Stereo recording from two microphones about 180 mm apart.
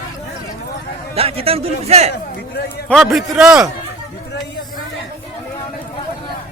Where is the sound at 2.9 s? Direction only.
Centre (ahead or behind).